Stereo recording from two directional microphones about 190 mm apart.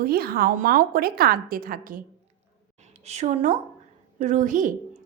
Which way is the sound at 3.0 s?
35° right (ahead or behind).